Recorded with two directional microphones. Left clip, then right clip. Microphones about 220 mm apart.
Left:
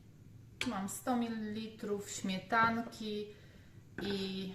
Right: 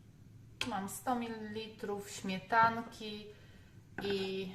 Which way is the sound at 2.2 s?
15° right (ahead or behind).